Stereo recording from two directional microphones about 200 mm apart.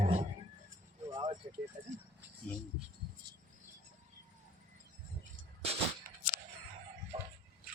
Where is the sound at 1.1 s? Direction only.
20° right (ahead or behind).